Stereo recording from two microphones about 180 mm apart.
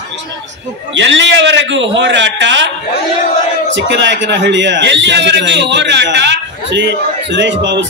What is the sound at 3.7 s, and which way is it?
A man's voice, 75° right (ahead or behind).